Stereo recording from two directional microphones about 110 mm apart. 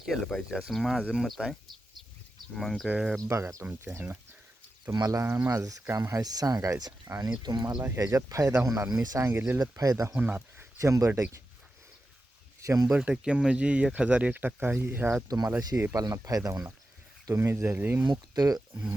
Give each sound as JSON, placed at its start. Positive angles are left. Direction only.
{"t": 0.0, "sound": "speech", "side_deg": 0}
{"t": 2.6, "sound": "speech", "side_deg": 0}
{"t": 3.2, "sound": "speech", "side_deg": -25}
{"t": 4.9, "sound": "speech", "side_deg": -30}
{"t": 5.2, "sound": "speech", "side_deg": -15}
{"t": 5.5, "sound": "speech", "side_deg": -30}
{"t": 7.7, "sound": "speech", "side_deg": -20}
{"t": 7.9, "sound": "speech", "side_deg": -30}
{"t": 10.2, "sound": "speech", "side_deg": -15}
{"t": 10.8, "sound": "speech", "side_deg": -30}
{"t": 12.6, "sound": "speech", "side_deg": -30}
{"t": 12.9, "sound": "speech", "side_deg": -10}
{"t": 18.1, "sound": "speech", "side_deg": -35}